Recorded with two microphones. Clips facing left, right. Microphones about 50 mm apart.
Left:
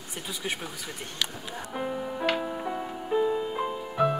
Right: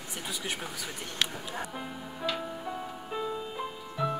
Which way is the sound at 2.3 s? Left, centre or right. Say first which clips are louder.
Left 5 dB; left.